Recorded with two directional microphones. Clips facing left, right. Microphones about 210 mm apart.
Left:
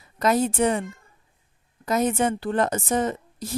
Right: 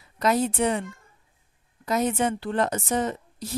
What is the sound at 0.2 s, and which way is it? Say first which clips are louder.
Speech: left 2 dB; 45° left (ahead or behind).